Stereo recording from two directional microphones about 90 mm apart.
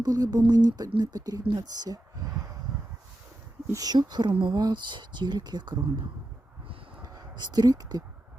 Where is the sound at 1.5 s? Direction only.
50° right (ahead or behind).